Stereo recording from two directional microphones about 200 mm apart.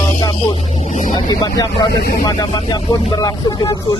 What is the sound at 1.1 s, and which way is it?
Speech, 20° left (ahead or behind).